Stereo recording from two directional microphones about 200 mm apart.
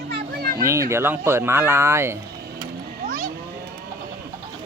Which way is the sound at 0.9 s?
10° right (ahead or behind).